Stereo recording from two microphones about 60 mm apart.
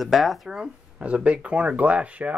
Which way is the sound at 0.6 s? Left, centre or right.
Right.